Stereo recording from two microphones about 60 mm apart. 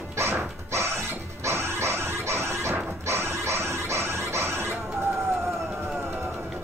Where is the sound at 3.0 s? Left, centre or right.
Right.